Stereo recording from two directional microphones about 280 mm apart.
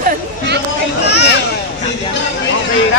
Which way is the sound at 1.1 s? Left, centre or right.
Left.